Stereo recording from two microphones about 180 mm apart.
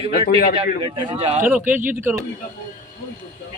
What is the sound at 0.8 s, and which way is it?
Speech, 30° right (ahead or behind).